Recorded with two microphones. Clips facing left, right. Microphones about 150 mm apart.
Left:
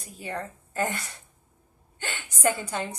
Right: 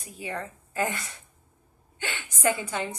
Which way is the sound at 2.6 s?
35° left (ahead or behind).